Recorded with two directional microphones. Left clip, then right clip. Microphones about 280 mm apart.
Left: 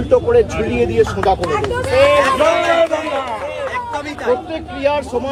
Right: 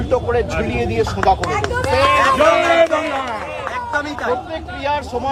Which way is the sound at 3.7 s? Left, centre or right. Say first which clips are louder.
Right 1 dB; centre.